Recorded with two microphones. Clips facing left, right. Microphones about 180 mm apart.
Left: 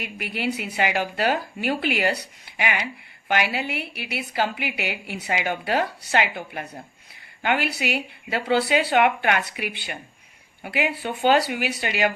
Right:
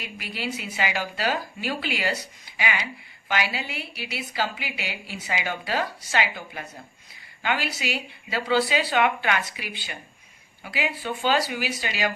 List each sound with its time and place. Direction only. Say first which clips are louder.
0.0 s a woman's voice: left 5 dB; 60° left (ahead or behind)